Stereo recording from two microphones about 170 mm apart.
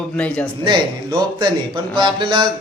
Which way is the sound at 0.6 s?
30° right (ahead or behind).